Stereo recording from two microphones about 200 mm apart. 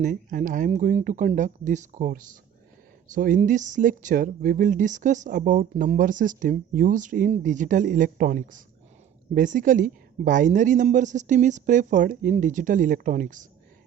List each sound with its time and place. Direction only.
0.0 s speech: 40° right (ahead or behind)